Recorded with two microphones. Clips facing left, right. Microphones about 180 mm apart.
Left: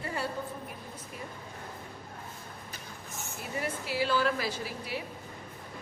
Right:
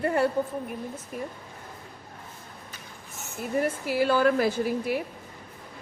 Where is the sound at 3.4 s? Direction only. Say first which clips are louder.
Right 9 dB; 50° right (ahead or behind).